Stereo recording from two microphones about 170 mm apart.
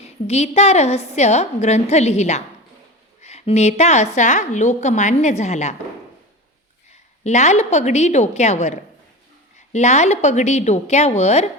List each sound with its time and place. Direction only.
0.0 s a woman's voice: 40° left (ahead or behind)
7.3 s a woman's voice: 40° left (ahead or behind)